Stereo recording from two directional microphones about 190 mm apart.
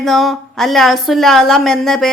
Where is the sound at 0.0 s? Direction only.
Centre (ahead or behind).